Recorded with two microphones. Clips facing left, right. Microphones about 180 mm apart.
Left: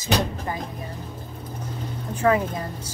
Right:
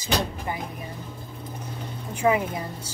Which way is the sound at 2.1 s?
15° right (ahead or behind).